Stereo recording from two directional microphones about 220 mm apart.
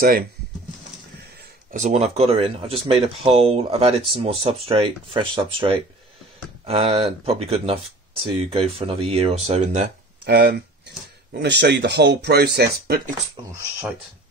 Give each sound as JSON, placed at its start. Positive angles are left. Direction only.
{"t": 1.7, "sound": "speech", "side_deg": -30}
{"t": 10.2, "sound": "speech", "side_deg": -45}
{"t": 13.4, "sound": "speech", "side_deg": -20}